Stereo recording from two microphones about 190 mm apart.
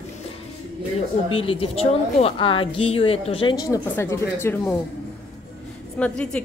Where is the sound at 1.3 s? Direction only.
30° left (ahead or behind); by 4.7 s 15° left (ahead or behind).